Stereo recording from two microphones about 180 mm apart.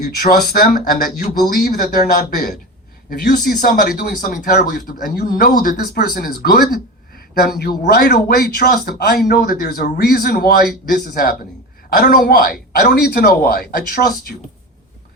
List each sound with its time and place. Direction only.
0.0 s speech: 55° left (ahead or behind)